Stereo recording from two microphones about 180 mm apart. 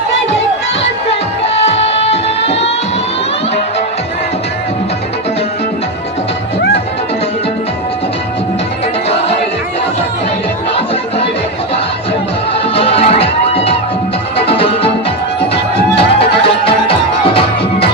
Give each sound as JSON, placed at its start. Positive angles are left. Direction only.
{"t": 1.7, "sound": "music", "side_deg": 35}
{"t": 12.7, "sound": "music", "side_deg": 30}
{"t": 16.0, "sound": "music", "side_deg": 30}